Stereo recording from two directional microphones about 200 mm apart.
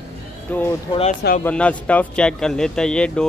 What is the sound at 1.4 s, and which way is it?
A man's voice, 5° left (ahead or behind).